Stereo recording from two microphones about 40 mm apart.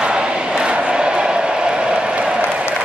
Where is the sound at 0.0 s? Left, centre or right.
Right.